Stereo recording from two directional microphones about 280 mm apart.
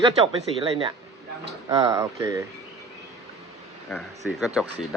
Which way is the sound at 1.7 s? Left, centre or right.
Centre.